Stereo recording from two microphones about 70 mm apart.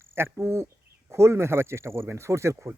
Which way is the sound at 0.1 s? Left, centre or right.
Right.